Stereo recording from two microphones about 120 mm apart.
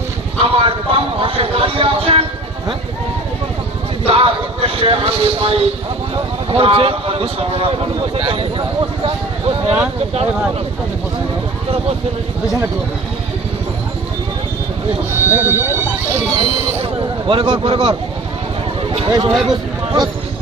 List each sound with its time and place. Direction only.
0.4 s a man's voice: 50° right (ahead or behind)
4.0 s a man's voice: 55° right (ahead or behind)
15.3 s speech: 20° right (ahead or behind)
16.8 s a sound: 50° right (ahead or behind)
17.4 s speech: 40° right (ahead or behind)
18.8 s a sound: 50° right (ahead or behind)
19.3 s speech: centre (ahead or behind)